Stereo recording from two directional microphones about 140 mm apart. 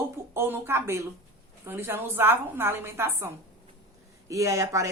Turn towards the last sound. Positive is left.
turn(degrees=-20)  # may be behind; listen again after turning